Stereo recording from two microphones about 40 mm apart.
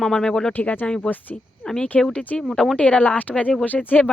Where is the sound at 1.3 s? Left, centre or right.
Left.